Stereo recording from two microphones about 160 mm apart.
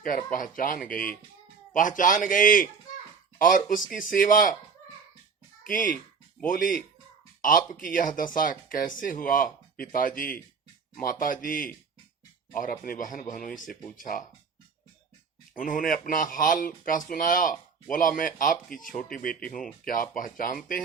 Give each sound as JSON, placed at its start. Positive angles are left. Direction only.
{"t": 0.0, "sound": "speech", "side_deg": 55}
{"t": 5.6, "sound": "speech", "side_deg": 60}
{"t": 15.5, "sound": "speech", "side_deg": 60}
{"t": 18.9, "sound": "speech", "side_deg": 5}
{"t": 19.2, "sound": "speech", "side_deg": 60}